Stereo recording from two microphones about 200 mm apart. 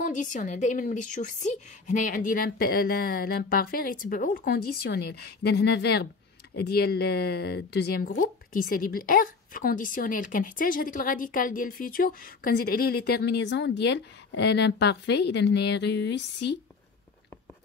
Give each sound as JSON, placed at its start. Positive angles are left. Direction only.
{"t": 0.0, "sound": "a woman's voice", "side_deg": 40}